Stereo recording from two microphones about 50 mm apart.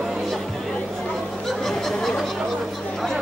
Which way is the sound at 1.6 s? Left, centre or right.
Centre.